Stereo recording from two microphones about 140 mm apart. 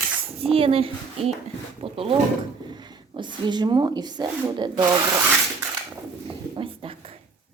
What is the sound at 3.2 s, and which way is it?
Speech, 35° right (ahead or behind).